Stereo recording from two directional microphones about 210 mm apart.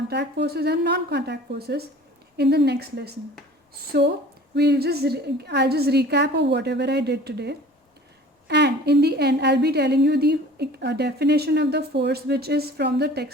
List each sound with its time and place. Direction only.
0.1 s a woman's voice: 55° right (ahead or behind)